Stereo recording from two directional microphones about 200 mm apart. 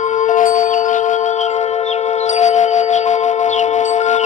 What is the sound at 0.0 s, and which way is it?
Music, 40° left (ahead or behind).